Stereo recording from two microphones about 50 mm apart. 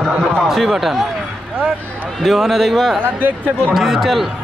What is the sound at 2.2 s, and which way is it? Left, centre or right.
A man's voice, centre.